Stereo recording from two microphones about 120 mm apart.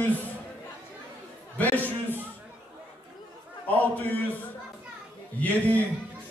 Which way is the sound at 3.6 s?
15° left (ahead or behind).